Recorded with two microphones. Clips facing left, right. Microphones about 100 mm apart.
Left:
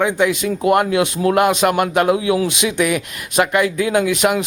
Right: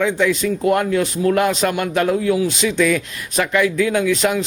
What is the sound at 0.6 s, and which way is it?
A man's voice, 65° left (ahead or behind).